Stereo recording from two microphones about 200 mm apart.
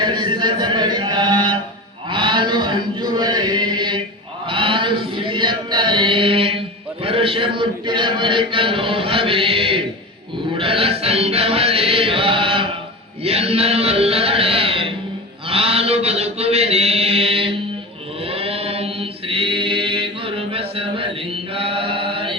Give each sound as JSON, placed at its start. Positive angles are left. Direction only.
{"t": 0.0, "sound": "chant", "side_deg": -20}
{"t": 7.0, "sound": "a sound", "side_deg": -30}
{"t": 10.6, "sound": "music", "side_deg": -30}
{"t": 15.4, "sound": "chant", "side_deg": -30}